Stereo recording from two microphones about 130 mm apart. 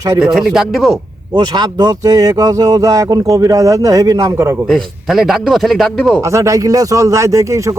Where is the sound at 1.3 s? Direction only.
30° right (ahead or behind).